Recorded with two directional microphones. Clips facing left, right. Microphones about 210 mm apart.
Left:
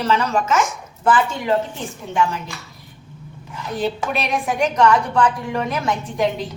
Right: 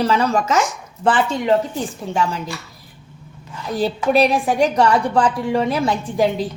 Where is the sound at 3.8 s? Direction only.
35° right (ahead or behind).